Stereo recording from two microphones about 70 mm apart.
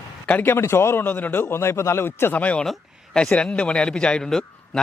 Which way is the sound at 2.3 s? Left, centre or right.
Left.